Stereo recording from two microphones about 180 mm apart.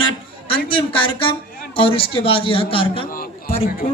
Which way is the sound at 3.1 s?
55° left (ahead or behind).